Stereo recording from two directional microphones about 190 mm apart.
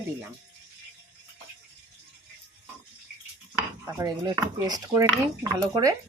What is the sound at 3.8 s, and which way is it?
Speech, 20° right (ahead or behind).